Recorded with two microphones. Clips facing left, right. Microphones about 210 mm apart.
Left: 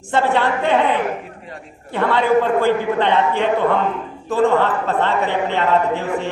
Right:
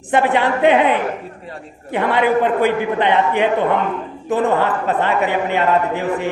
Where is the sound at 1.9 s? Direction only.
15° right (ahead or behind).